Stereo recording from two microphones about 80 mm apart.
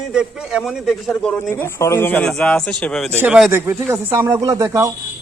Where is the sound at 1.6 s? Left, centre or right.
Left.